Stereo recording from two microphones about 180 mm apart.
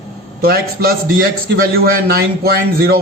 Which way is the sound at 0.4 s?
60° right (ahead or behind).